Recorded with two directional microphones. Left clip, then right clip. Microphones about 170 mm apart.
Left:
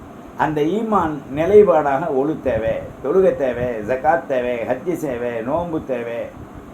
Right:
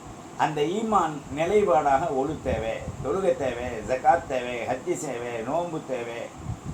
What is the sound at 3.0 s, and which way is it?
Speech, 55° left (ahead or behind).